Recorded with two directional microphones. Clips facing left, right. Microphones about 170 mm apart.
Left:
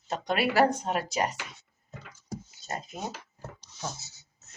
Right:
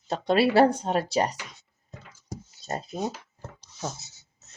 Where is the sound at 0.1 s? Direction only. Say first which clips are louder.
Right 6 dB; 30° right (ahead or behind).